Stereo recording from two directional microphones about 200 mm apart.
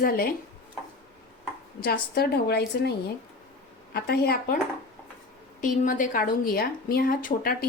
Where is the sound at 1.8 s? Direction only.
50° left (ahead or behind).